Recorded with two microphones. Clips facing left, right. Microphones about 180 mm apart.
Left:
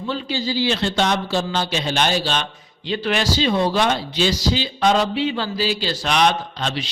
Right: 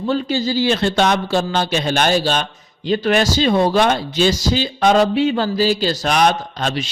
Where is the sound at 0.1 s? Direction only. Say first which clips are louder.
Right 5 dB; 45° right (ahead or behind).